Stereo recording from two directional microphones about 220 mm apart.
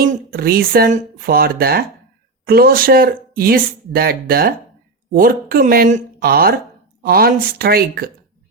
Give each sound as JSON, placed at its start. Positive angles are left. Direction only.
{"t": 0.0, "sound": "speech", "side_deg": -40}